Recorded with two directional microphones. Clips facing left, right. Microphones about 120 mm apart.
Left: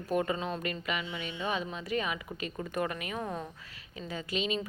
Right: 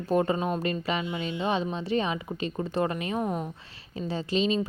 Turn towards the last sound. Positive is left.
turn(degrees=-30)  # may be behind; listen again after turning